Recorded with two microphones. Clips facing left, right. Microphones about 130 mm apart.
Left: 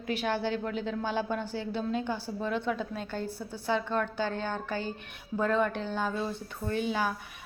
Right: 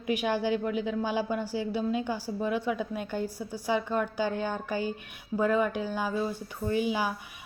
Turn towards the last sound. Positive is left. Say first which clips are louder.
# right 2 dB
turn(degrees=-10)  # may be behind; listen again after turning